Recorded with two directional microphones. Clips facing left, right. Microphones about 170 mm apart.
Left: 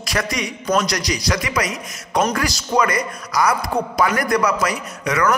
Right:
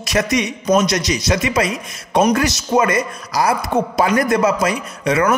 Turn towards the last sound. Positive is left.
turn(degrees=-25)  # may be behind; listen again after turning